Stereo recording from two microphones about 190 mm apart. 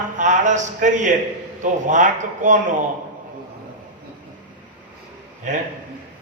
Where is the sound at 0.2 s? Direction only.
40° right (ahead or behind).